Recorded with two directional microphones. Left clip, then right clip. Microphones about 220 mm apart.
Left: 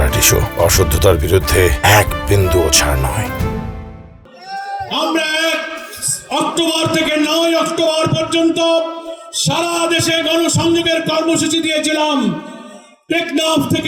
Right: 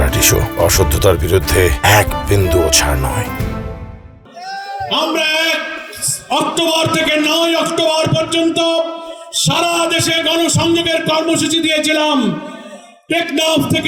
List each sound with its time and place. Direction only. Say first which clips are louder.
0.0 s speech: even; centre (ahead or behind)
4.9 s music: right 2 dB; 20° right (ahead or behind)
9.3 s a man's voice: right 2 dB; 20° right (ahead or behind)